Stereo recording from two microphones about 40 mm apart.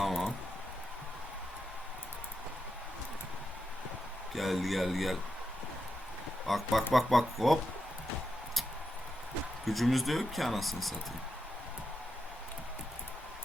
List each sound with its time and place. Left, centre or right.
0.0 s a sound: centre
4.4 s speech: centre
6.5 s speech: centre
9.6 s speech: centre